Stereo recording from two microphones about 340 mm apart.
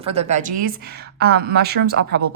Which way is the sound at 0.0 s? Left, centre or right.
Centre.